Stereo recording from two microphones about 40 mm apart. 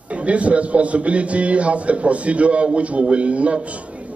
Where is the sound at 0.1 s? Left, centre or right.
Right.